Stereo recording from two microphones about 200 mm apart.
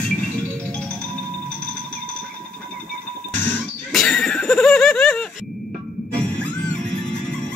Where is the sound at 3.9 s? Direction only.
5° left (ahead or behind).